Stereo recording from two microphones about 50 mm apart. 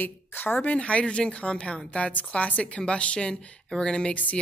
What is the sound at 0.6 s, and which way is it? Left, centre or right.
Speech, left.